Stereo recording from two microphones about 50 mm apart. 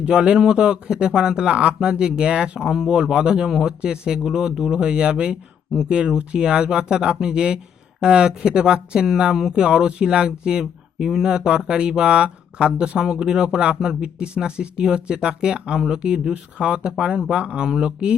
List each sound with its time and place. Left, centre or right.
0.0 s speech: centre
13.0 s speech: centre